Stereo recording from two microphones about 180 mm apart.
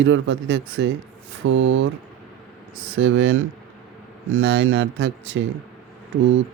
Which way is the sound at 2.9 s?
90° right.